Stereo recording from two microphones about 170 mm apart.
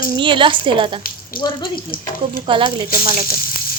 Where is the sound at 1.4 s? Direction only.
60° left (ahead or behind).